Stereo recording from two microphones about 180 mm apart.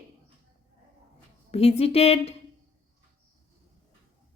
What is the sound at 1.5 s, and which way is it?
Speech, 35° left (ahead or behind).